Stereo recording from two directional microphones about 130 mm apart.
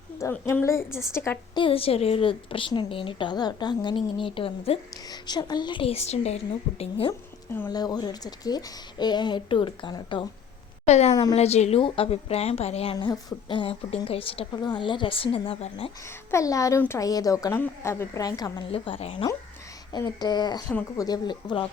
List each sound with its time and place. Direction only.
0.2 s a woman's voice: 20° left (ahead or behind)
1.5 s a woman's voice: 45° left (ahead or behind)
5.0 s speech: 35° left (ahead or behind); by 7.1 s 50° left (ahead or behind)
7.1 s a woman's voice: 15° left (ahead or behind)
7.7 s speech: 30° left (ahead or behind)
10.8 s a woman's voice: 60° left (ahead or behind)
11.1 s a woman's voice: 30° left (ahead or behind)
11.3 s a woman's voice: 55° left (ahead or behind)
14.5 s speech: 35° left (ahead or behind)
16.0 s a woman's voice: 25° left (ahead or behind)
18.7 s a woman's voice: 45° left (ahead or behind)
20.1 s speech: 35° left (ahead or behind)